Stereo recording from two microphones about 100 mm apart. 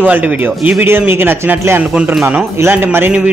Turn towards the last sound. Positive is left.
turn(degrees=-20)  # may be behind; listen again after turning